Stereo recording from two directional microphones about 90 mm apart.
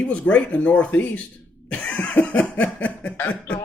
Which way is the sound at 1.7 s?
15° left (ahead or behind).